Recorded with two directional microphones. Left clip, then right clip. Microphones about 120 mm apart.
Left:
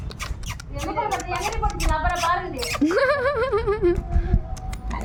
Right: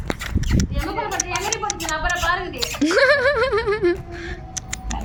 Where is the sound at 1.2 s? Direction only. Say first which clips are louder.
Right 2 dB; 5° left (ahead or behind).